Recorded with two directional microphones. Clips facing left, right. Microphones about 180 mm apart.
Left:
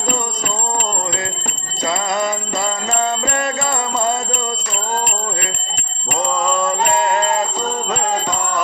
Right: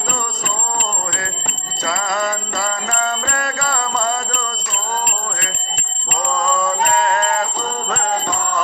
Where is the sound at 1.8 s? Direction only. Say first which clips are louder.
Left 2 dB; 20° left (ahead or behind).